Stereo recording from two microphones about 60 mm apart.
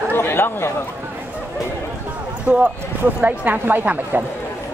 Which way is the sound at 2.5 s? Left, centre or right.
Right.